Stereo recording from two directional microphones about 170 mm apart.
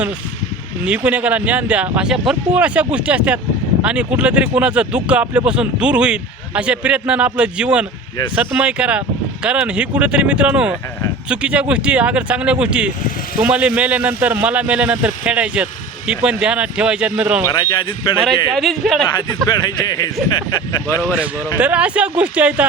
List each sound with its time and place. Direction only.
0.9 s speech: 5° right (ahead or behind)
17.5 s speech: 25° left (ahead or behind)
18.5 s speech: centre (ahead or behind)
19.5 s speech: 25° left (ahead or behind)
21.6 s speech: 5° right (ahead or behind)